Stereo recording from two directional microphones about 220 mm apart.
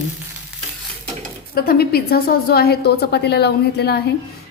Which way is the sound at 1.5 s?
45° left (ahead or behind).